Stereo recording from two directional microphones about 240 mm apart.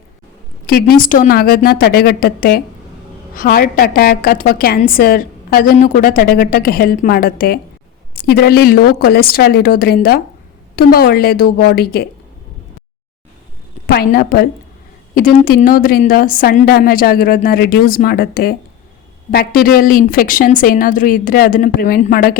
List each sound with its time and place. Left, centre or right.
0.7 s a woman's voice: left
13.8 s a woman's voice: left
19.6 s a woman's voice: left